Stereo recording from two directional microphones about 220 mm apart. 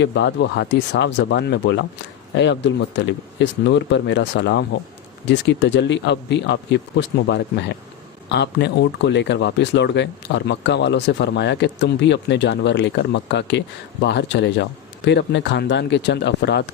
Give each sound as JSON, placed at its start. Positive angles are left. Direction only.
{"t": 0.0, "sound": "speech", "side_deg": 55}